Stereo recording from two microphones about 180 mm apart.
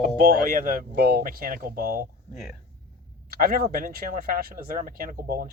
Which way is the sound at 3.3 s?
55° right (ahead or behind).